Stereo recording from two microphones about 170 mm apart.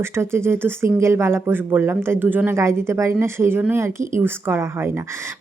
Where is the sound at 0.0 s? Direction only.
15° right (ahead or behind).